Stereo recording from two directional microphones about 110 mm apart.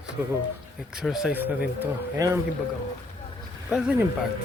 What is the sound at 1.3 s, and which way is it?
Speech, 15° right (ahead or behind).